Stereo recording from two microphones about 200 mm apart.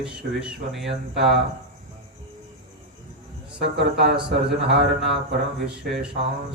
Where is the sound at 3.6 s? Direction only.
55° right (ahead or behind).